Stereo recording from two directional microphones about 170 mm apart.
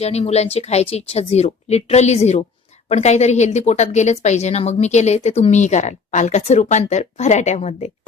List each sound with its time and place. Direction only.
0.0 s a woman's voice: 40° left (ahead or behind)